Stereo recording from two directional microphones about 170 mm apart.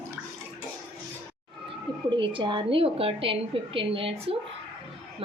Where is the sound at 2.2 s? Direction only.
30° right (ahead or behind).